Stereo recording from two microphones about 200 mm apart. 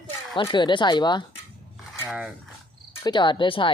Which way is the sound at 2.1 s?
5° right (ahead or behind).